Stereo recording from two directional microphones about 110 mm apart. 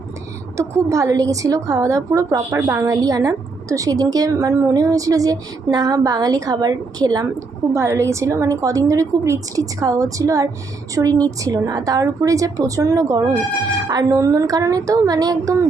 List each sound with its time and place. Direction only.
0.5 s a woman's voice: 25° right (ahead or behind)
2.8 s a woman's voice: 30° right (ahead or behind)
7.7 s a woman's voice: 25° right (ahead or behind)